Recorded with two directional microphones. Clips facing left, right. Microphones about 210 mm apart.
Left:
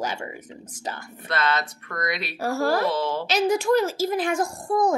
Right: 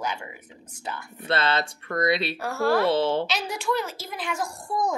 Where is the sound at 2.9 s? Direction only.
25° right (ahead or behind).